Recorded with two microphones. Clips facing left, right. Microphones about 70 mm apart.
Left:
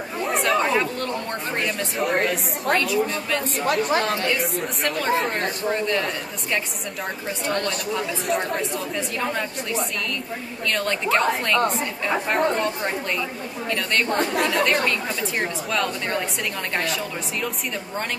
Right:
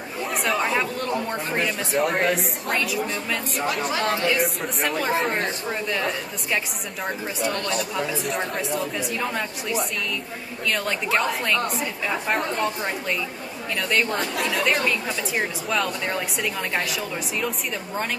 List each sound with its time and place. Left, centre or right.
0.2 s a woman's voice: centre
3.5 s a woman's voice: left
4.8 s a woman's voice: centre
7.9 s a woman's voice: centre
14.1 s a woman's voice: left
14.5 s a woman's voice: centre